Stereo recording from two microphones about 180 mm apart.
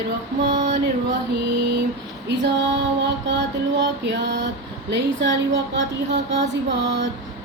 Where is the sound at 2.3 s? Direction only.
75° right (ahead or behind).